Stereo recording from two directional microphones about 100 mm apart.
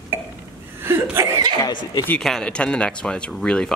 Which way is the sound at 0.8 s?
25° right (ahead or behind).